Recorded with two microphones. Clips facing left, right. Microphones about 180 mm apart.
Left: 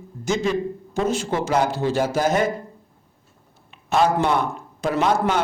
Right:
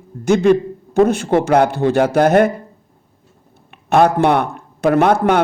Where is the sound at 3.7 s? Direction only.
60° right (ahead or behind).